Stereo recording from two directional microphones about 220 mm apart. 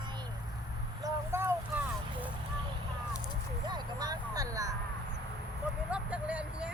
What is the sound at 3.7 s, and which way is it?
Speech, 20° right (ahead or behind).